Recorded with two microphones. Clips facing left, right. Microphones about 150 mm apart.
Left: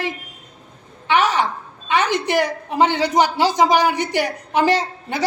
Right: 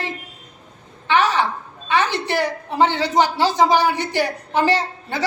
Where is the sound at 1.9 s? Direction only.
15° left (ahead or behind).